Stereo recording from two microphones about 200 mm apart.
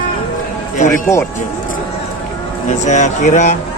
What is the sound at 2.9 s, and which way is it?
Speech, 35° left (ahead or behind).